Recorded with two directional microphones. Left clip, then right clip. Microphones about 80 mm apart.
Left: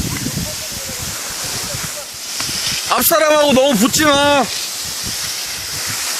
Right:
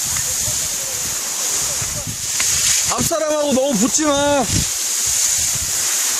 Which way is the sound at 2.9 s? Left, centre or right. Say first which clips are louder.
Left 6 dB; left.